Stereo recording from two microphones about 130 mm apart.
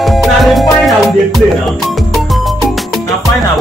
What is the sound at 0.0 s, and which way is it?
Music, centre (ahead or behind).